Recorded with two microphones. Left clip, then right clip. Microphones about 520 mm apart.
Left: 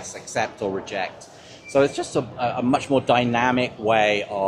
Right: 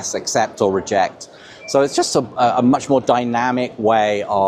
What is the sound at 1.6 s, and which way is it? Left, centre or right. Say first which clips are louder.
Speech: right 4 dB; right.